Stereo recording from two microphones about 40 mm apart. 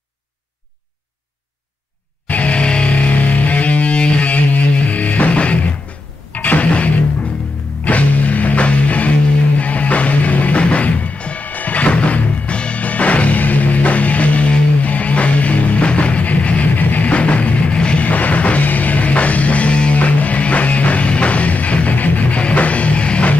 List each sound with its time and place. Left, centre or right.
2.2 s music: left
6.3 s music: left
7.8 s music: left
17.1 s music: left
18.0 s music: left